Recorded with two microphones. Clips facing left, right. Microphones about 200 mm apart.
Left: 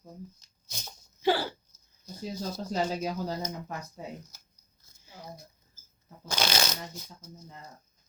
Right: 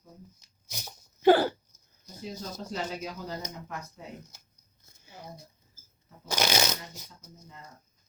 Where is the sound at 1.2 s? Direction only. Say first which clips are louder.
Right 7 dB; 50° right (ahead or behind).